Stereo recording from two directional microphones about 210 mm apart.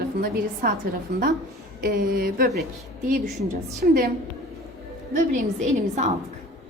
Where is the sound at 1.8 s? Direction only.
45° right (ahead or behind).